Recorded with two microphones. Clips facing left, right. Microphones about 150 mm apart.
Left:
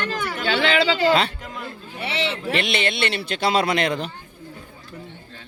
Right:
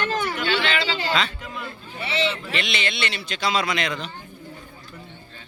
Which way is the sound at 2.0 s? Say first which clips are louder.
Even; 65° left (ahead or behind).